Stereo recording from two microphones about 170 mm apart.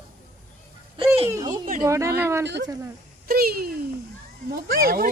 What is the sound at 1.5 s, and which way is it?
Speech, 55° right (ahead or behind).